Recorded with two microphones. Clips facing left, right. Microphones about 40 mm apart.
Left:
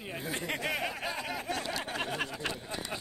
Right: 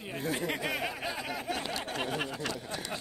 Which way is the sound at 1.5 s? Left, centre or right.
Centre.